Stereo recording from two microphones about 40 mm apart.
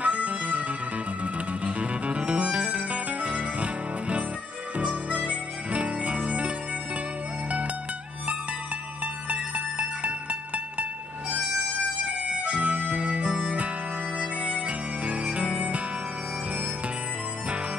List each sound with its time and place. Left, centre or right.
0.0 s music: right
4.7 s harmonica: right
9.0 s music: right
12.3 s harmonica: right